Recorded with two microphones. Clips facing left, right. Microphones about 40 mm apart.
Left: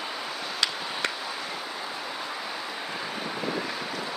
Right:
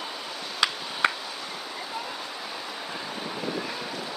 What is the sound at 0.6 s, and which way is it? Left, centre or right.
Tick, centre.